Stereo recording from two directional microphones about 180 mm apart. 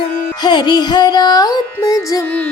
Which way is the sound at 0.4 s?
25° left (ahead or behind).